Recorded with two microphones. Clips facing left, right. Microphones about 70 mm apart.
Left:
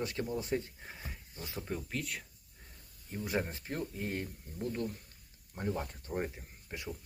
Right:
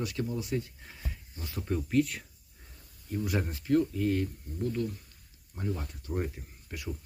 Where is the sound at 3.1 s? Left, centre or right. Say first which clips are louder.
Right 3 dB; left.